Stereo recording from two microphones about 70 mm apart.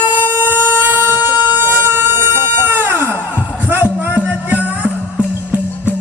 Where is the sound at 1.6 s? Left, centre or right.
Right.